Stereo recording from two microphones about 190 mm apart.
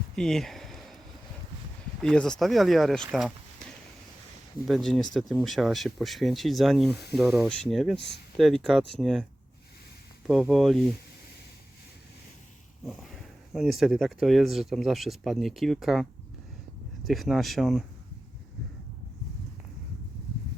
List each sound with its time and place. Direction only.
0.2 s a sound: centre (ahead or behind)
2.0 s speech: 5° left (ahead or behind)
10.2 s speech: 5° right (ahead or behind)
12.8 s speech: centre (ahead or behind)
17.1 s speech: centre (ahead or behind)